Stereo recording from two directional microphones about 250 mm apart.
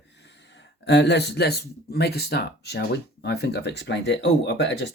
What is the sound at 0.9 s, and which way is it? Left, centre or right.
Speech, left.